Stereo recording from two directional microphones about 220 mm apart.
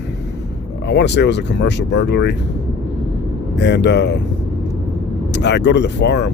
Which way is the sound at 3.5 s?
50° left (ahead or behind).